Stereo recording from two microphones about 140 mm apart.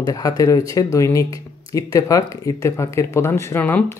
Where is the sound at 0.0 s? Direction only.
25° left (ahead or behind).